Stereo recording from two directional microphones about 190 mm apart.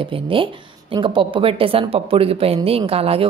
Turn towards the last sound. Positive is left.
turn(degrees=-30)  # may be behind; listen again after turning